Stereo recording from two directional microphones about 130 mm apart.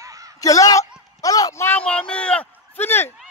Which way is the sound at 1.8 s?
10° left (ahead or behind).